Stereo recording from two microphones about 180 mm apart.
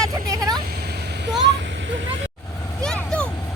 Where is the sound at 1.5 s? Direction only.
85° right.